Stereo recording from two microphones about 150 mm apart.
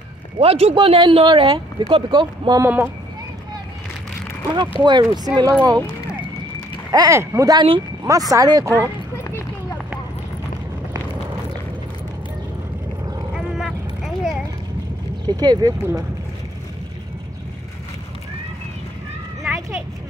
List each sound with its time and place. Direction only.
0.4 s speech: 40° right (ahead or behind)
2.6 s speech: 15° right (ahead or behind)
4.6 s speech: 30° right (ahead or behind)
6.9 s speech: 25° right (ahead or behind)
13.6 s a sound: centre (ahead or behind)
15.2 s speech: 25° right (ahead or behind)
19.4 s a sound: 5° right (ahead or behind)